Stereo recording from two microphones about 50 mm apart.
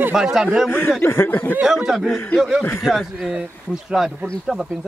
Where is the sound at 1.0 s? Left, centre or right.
Left.